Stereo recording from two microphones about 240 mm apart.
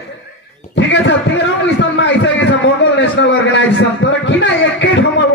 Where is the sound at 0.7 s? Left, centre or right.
Left.